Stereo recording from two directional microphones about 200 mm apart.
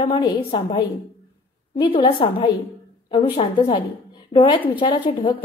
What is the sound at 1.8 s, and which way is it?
A woman's voice, 25° left (ahead or behind).